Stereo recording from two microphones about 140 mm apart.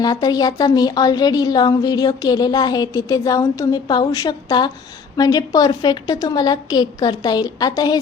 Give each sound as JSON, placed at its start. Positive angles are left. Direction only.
{"t": 0.0, "sound": "a woman's voice", "side_deg": 30}